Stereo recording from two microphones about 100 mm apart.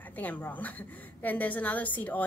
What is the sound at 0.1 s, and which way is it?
A woman's voice, 15° left (ahead or behind).